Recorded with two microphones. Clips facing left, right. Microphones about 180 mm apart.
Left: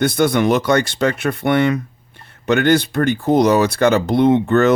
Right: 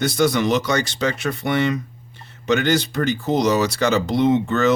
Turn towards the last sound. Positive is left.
turn(degrees=55)  # may be behind; listen again after turning